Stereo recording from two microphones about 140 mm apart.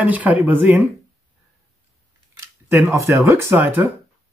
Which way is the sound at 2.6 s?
20° right (ahead or behind).